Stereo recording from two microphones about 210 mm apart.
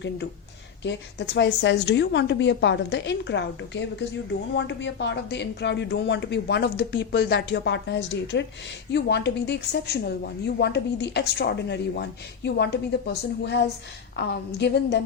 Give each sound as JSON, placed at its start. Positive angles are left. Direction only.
{"t": 0.9, "sound": "a woman's voice", "side_deg": 55}